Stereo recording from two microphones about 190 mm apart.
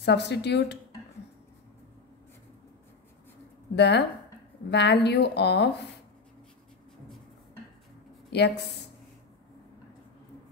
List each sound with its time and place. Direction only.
0.0 s a woman's voice: 65° left (ahead or behind)
3.7 s a woman's voice: 60° left (ahead or behind)
8.3 s a woman's voice: 60° left (ahead or behind)